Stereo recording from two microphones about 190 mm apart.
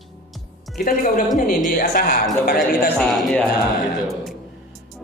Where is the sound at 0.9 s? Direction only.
45° left (ahead or behind).